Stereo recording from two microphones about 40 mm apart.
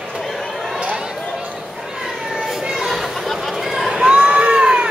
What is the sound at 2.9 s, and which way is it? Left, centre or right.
Chatter, centre.